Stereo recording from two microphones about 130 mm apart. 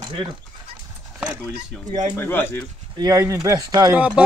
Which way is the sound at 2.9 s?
25° right (ahead or behind).